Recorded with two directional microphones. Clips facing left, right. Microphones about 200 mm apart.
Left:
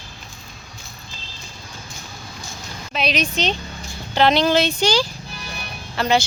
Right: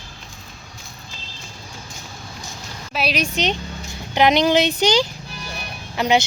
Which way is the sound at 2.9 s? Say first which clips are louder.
Even; 5° right (ahead or behind).